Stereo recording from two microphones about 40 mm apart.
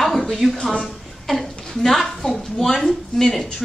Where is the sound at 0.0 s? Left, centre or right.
Centre.